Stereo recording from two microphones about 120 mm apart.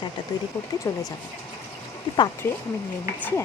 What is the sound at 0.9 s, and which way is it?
Speech, 25° left (ahead or behind).